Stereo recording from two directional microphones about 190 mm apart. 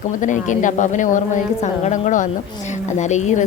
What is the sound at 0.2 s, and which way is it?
A woman's voice, 40° left (ahead or behind).